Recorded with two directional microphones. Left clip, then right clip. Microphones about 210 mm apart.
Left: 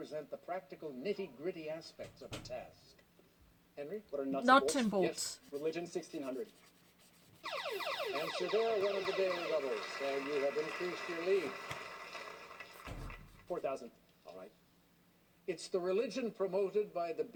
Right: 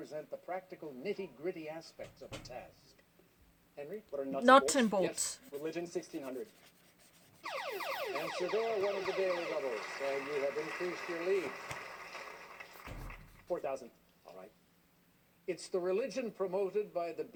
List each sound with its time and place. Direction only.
0.0 s speech: 30° right (ahead or behind)
3.8 s speech: 35° right (ahead or behind)
7.4 s music: 30° right (ahead or behind)
15.4 s speech: 30° right (ahead or behind)